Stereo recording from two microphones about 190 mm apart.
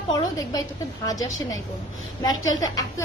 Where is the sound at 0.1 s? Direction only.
20° left (ahead or behind).